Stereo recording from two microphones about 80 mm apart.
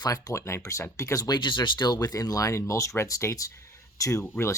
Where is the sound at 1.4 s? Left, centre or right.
Left.